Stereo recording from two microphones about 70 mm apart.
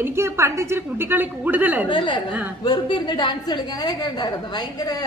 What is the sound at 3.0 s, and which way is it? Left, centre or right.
A woman's voice, left.